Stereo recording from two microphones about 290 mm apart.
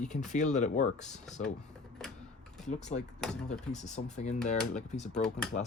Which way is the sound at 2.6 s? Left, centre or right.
Left.